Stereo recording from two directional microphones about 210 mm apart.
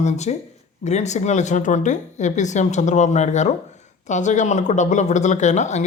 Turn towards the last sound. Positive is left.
turn(degrees=35)  # may be behind; listen again after turning